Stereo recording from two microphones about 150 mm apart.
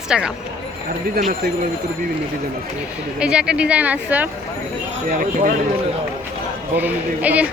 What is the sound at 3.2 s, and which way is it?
Speech, 5° right (ahead or behind).